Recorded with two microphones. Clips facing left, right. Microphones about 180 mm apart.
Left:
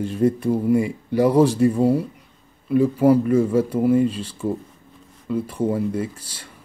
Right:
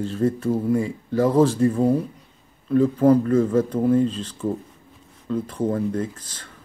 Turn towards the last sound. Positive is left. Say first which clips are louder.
# left 1 dB
turn(degrees=10)  # may be behind; listen again after turning